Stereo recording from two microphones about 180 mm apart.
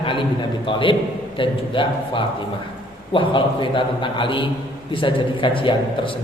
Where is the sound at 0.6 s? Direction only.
30° left (ahead or behind).